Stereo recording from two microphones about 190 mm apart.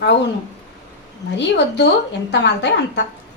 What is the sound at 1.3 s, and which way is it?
Speech, 65° left (ahead or behind).